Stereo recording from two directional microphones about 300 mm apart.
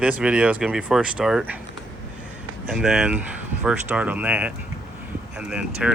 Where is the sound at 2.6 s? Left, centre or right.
Centre.